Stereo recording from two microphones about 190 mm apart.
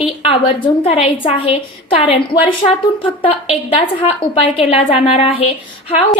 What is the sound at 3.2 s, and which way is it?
A woman's voice, 30° left (ahead or behind).